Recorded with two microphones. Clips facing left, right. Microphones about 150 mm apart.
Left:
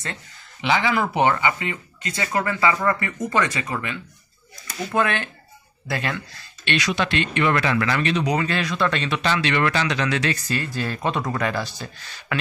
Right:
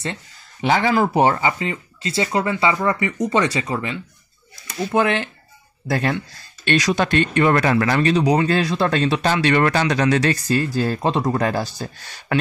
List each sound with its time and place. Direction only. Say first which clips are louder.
0.6 s speech: right 4 dB; 45° right (ahead or behind); by 3.3 s 15° right (ahead or behind)
3.3 s speech: right 2 dB; 30° right (ahead or behind)
5.9 s speech: right 6 dB; 40° right (ahead or behind)